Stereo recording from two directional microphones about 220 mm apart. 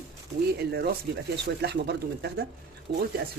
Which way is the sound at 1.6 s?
50° right (ahead or behind).